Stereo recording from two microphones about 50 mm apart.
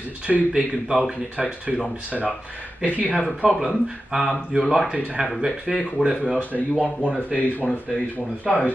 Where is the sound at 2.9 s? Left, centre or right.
Left.